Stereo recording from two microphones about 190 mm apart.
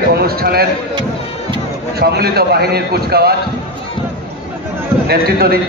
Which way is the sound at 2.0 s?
55° right (ahead or behind).